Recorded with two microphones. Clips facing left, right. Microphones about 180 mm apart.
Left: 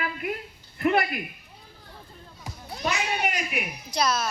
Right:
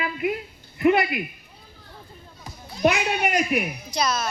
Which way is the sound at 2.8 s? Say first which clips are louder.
Right 6 dB; 60° right (ahead or behind).